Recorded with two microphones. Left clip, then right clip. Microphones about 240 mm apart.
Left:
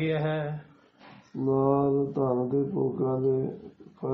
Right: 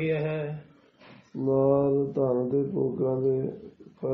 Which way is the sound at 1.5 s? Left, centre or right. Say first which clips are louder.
Right 2 dB; centre.